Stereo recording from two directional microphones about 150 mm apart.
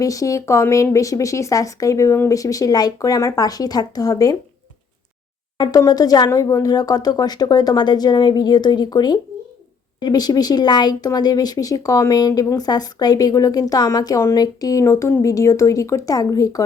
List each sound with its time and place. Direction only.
0.0 s speech: 20° left (ahead or behind)
5.5 s speech: 25° left (ahead or behind)